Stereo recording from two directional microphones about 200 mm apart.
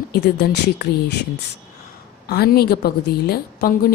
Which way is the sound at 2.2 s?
50° left (ahead or behind).